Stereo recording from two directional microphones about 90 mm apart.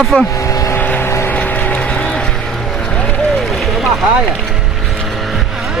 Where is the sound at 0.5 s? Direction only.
40° left (ahead or behind).